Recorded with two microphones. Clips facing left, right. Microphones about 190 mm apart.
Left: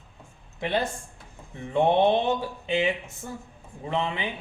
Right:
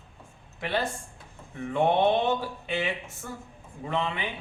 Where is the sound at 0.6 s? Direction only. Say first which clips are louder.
Left 3 dB; 20° left (ahead or behind).